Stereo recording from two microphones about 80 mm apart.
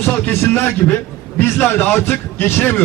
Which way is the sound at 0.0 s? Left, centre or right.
Left.